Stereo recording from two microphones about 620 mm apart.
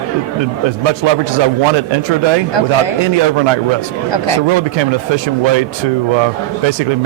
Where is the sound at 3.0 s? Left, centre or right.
Right.